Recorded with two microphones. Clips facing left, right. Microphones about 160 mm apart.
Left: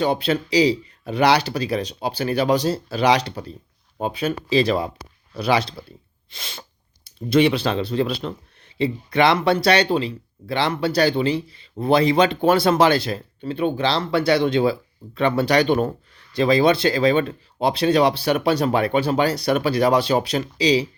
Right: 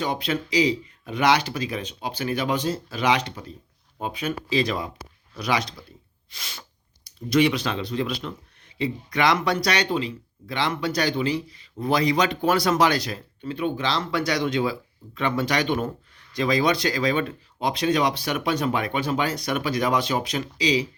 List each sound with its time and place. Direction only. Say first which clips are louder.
0.0 s speech: left 6 dB; 30° left (ahead or behind)